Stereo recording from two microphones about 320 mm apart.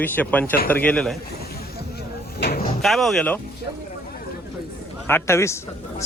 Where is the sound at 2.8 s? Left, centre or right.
Centre.